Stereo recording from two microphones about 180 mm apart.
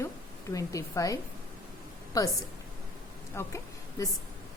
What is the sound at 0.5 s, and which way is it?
Speech, 20° left (ahead or behind).